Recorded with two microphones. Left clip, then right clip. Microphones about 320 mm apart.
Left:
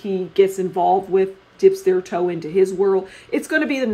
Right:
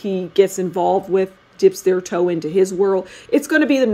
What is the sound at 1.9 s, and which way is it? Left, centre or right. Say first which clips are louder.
Speech: right 1 dB; right.